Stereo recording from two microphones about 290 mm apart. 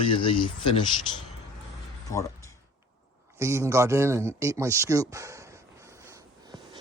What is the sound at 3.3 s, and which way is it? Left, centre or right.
A man's voice, centre.